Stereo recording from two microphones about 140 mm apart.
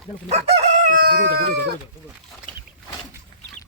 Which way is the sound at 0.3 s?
50° right (ahead or behind).